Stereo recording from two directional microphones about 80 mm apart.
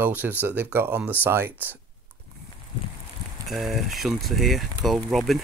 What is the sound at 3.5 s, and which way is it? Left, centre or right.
Speech, centre.